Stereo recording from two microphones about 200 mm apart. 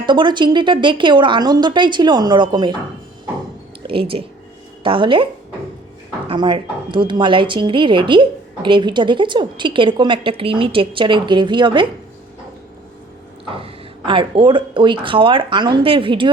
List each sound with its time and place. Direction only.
0.0 s a woman's voice: 25° right (ahead or behind)
3.8 s a woman's voice: 25° right (ahead or behind)
13.6 s a woman's voice: 25° right (ahead or behind)